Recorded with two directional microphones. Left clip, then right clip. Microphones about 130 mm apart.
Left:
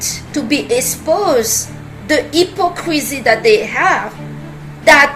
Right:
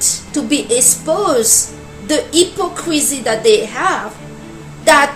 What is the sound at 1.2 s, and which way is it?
A woman's voice, 35° right (ahead or behind).